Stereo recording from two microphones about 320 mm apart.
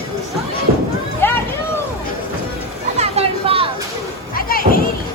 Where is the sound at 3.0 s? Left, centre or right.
Centre.